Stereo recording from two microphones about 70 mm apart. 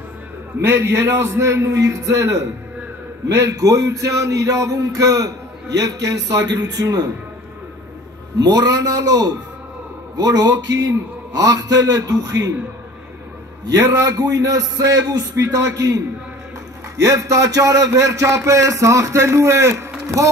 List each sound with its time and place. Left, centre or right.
0.6 s a man's voice: right
8.4 s a man's voice: right
13.7 s a man's voice: right